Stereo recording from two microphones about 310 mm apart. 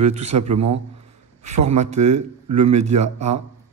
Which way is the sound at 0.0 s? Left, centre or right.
Right.